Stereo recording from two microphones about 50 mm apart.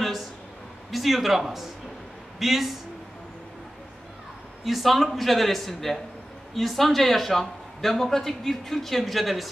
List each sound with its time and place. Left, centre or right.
0.0 s a sound: centre
0.9 s speech: centre
4.6 s speech: centre